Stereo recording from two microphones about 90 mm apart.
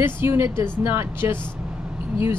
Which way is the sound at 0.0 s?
25° right (ahead or behind).